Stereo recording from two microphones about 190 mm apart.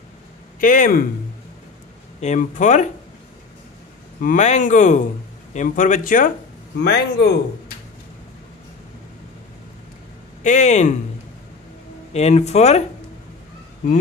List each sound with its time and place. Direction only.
0.6 s speech: 45° left (ahead or behind)
2.1 s speech: 40° left (ahead or behind)
4.2 s speech: 40° left (ahead or behind)
6.8 s speech: 60° left (ahead or behind)
10.4 s speech: 40° left (ahead or behind)
12.1 s speech: 35° left (ahead or behind)